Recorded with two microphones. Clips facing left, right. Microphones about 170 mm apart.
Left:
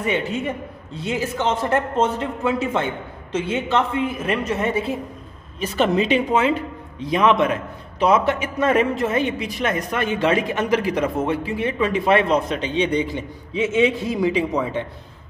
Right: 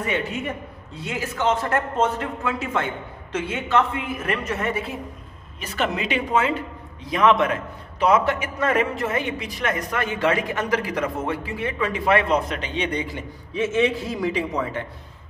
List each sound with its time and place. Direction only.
0.0 s a man's voice: 25° left (ahead or behind)